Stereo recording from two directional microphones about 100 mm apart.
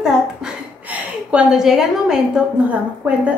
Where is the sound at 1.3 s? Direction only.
5° right (ahead or behind).